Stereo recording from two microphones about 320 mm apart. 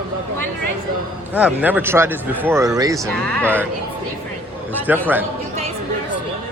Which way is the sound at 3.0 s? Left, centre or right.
Centre.